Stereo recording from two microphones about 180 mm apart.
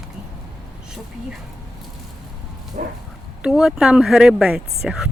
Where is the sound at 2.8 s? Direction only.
50° right (ahead or behind).